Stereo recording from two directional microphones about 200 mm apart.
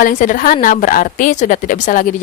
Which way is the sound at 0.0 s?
40° left (ahead or behind).